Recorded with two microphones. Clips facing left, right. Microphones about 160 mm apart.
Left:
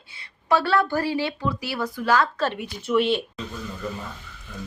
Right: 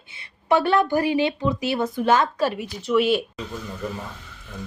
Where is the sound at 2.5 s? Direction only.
Centre (ahead or behind).